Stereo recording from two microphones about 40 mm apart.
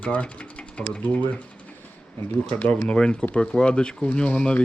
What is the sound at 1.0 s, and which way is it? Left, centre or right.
Speech, left.